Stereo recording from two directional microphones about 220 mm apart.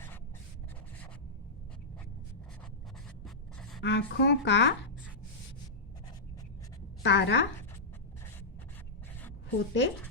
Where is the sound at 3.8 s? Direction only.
55° left (ahead or behind).